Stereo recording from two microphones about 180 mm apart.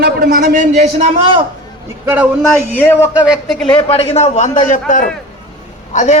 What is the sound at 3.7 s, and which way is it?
A man's voice, 35° left (ahead or behind).